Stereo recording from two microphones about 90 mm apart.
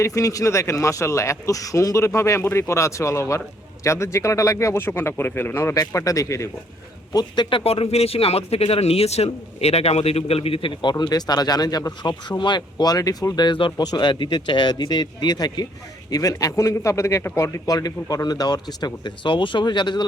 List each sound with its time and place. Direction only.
0.0 s speech: 35° left (ahead or behind)
5.7 s speech: 40° left (ahead or behind)
7.1 s speech: 45° left (ahead or behind)
7.5 s speech: 90° left; by 12.1 s 45° left (ahead or behind)
12.4 s speech: 55° left (ahead or behind); by 17.6 s 30° left (ahead or behind)
17.7 s speech: 45° left (ahead or behind)